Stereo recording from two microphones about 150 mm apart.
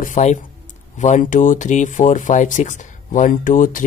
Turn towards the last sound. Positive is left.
turn(degrees=60)  # may be behind; listen again after turning